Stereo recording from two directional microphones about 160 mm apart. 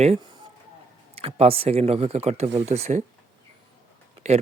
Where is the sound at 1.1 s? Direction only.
40° right (ahead or behind).